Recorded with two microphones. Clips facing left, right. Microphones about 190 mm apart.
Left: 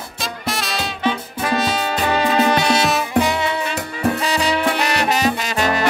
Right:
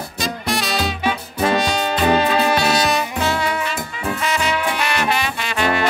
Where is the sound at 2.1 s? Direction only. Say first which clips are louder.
Left 1 dB; 10° right (ahead or behind).